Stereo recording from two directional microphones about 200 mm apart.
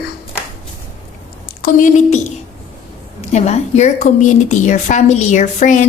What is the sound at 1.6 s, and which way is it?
Speech, 40° left (ahead or behind).